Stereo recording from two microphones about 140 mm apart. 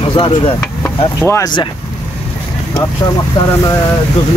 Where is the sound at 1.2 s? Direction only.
20° left (ahead or behind).